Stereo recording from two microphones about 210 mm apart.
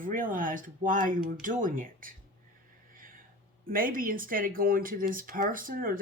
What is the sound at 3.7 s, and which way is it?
Speech, 40° right (ahead or behind).